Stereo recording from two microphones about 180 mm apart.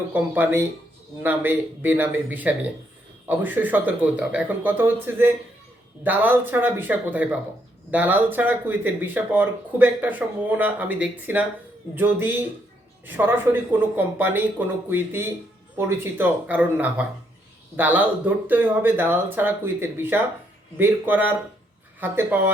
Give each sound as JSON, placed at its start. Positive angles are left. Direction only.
{"t": 0.1, "sound": "speech", "side_deg": -10}